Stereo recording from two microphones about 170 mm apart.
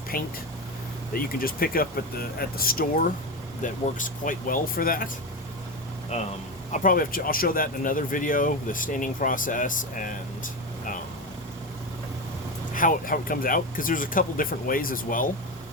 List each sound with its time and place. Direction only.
0.1 s speech: 60° left (ahead or behind)
6.7 s speech: 55° left (ahead or behind)
12.7 s speech: 55° left (ahead or behind)